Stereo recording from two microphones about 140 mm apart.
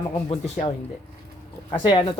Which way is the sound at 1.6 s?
35° left (ahead or behind).